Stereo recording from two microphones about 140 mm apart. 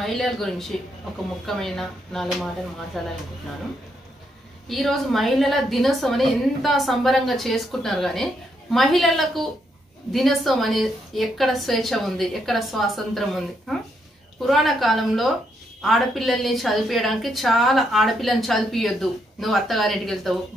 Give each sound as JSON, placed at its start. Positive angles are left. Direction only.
{"t": 0.0, "sound": "a woman's voice", "side_deg": 0}
{"t": 4.6, "sound": "a woman's voice", "side_deg": 0}